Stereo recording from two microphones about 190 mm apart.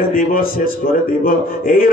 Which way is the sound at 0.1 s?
50° left (ahead or behind).